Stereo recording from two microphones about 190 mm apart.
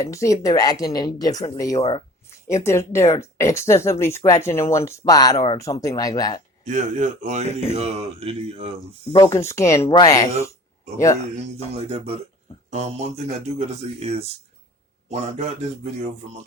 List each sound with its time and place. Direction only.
0.0 s speech: 15° left (ahead or behind)
6.7 s speech: 40° right (ahead or behind)
9.1 s speech: 15° left (ahead or behind)
11.9 s speech: 30° right (ahead or behind)